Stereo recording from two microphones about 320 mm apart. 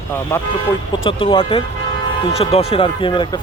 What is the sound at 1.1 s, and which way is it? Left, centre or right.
Speech, centre.